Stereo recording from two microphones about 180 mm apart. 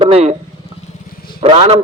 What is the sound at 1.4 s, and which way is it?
Speech, 30° right (ahead or behind).